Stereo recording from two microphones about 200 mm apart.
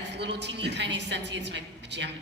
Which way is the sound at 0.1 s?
60° right (ahead or behind).